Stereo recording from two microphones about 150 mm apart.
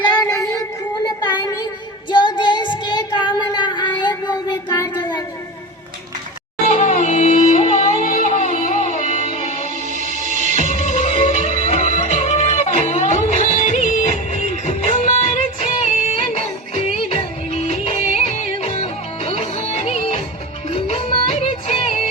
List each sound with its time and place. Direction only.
0.0 s child singing: 30° left (ahead or behind)
2.0 s child singing: 30° left (ahead or behind)
6.7 s music: 55° left (ahead or behind)
9.9 s music: 55° right (ahead or behind)
10.6 s music: 55° left (ahead or behind)